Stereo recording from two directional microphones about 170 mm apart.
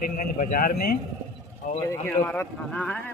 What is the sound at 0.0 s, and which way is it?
Speech, 55° left (ahead or behind).